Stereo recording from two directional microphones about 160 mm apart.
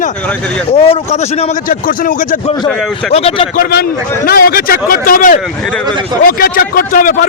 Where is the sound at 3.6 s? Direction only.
75° left (ahead or behind); by 5.4 s 60° left (ahead or behind).